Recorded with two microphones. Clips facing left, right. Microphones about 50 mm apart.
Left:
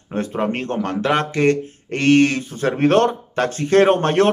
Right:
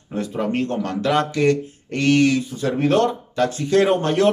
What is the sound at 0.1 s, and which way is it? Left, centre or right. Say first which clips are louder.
Speech: left 1 dB; left.